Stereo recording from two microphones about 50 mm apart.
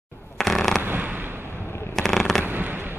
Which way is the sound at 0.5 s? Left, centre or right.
Centre.